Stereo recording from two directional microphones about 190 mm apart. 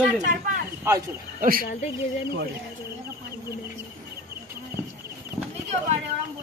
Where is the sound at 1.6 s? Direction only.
40° left (ahead or behind).